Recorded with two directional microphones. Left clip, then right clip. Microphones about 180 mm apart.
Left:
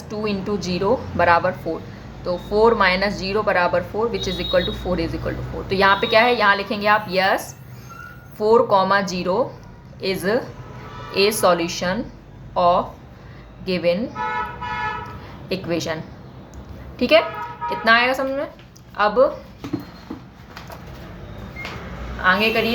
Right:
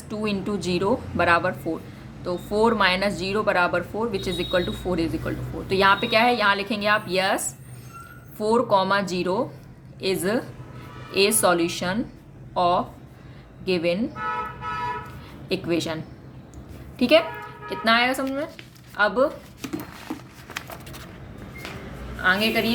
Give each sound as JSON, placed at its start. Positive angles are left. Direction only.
{"t": 0.2, "sound": "speech", "side_deg": -25}
{"t": 15.4, "sound": "speech", "side_deg": -25}
{"t": 17.0, "sound": "speech", "side_deg": -25}
{"t": 22.2, "sound": "speech", "side_deg": -20}